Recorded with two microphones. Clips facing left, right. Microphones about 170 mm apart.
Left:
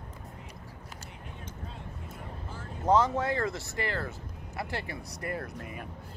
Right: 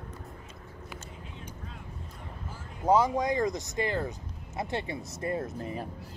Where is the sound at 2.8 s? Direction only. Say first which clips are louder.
Right 1 dB; 10° right (ahead or behind).